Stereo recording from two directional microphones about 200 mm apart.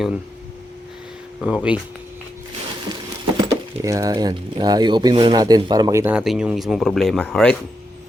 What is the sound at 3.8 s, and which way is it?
Speech, 15° right (ahead or behind).